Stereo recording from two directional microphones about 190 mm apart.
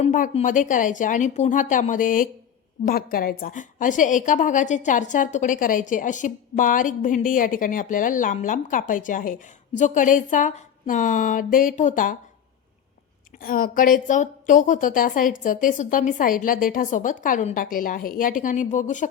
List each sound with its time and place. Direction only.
0.0 s a woman's voice: 40° left (ahead or behind)
13.4 s a woman's voice: 50° left (ahead or behind)